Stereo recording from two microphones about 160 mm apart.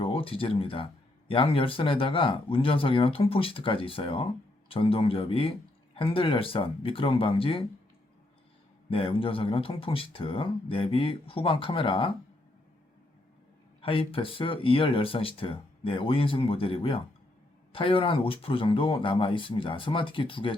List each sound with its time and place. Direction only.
0.0 s speech: 35° left (ahead or behind)
8.9 s speech: 35° left (ahead or behind)
13.8 s speech: 35° left (ahead or behind)